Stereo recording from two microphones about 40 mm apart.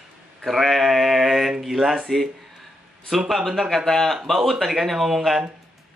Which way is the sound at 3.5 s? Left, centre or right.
Centre.